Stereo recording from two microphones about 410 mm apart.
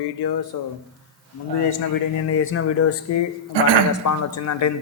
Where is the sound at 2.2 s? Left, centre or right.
Left.